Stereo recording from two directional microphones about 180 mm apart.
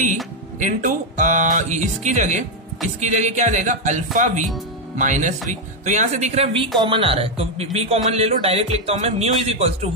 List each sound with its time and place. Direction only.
0.6 s a man's voice: 45° right (ahead or behind)